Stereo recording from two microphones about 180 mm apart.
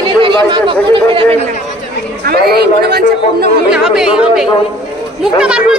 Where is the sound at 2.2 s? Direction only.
60° right (ahead or behind).